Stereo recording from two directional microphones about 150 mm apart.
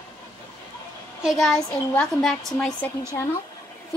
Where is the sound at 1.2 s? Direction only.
Centre (ahead or behind).